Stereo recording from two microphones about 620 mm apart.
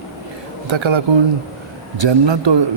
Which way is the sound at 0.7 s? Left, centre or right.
Right.